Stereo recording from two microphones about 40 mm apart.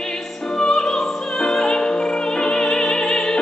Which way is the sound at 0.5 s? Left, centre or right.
Centre.